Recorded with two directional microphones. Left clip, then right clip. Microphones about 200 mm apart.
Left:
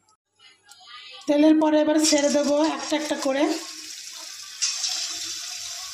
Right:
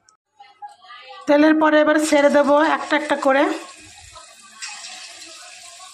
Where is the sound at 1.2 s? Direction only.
5° right (ahead or behind).